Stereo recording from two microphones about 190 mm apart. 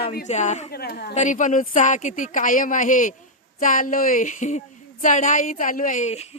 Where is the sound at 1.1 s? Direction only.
40° left (ahead or behind).